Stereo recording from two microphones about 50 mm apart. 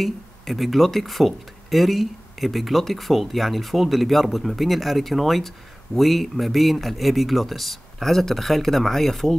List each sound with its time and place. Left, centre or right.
0.0 s speech: centre